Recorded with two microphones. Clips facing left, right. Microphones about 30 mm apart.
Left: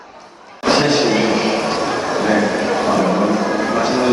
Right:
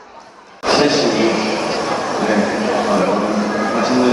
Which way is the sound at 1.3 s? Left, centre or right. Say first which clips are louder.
Left 1 dB; centre.